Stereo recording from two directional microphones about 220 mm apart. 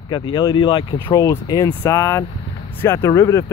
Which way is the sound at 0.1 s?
20° left (ahead or behind).